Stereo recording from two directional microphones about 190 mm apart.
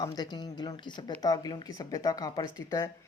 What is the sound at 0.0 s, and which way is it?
Speech, 20° left (ahead or behind).